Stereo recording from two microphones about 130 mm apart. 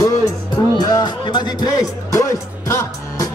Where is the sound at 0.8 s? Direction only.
30° left (ahead or behind).